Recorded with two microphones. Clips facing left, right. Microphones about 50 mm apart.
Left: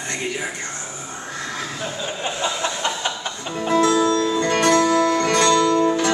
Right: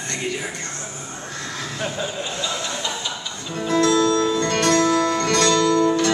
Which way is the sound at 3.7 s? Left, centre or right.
Centre.